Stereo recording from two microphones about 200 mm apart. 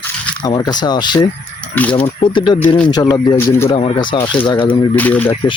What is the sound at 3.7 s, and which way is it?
Speech, 30° left (ahead or behind).